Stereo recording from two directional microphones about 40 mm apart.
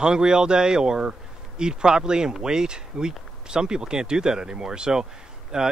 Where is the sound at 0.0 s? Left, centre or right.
Right.